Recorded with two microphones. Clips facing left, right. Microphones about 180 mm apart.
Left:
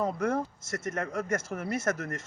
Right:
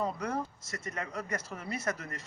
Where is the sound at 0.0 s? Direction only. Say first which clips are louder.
Left 5 dB; 50° left (ahead or behind).